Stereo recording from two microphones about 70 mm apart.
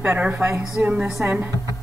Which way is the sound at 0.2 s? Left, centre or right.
Right.